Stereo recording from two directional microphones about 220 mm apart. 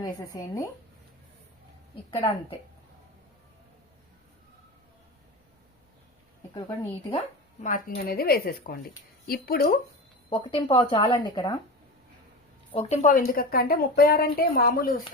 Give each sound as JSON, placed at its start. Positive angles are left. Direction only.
{"t": 0.0, "sound": "speech", "side_deg": 15}
{"t": 2.0, "sound": "speech", "side_deg": 25}
{"t": 6.5, "sound": "speech", "side_deg": 15}
{"t": 7.7, "sound": "a woman's voice", "side_deg": 45}
{"t": 10.2, "sound": "speech", "side_deg": 25}
{"t": 12.7, "sound": "a woman's voice", "side_deg": 30}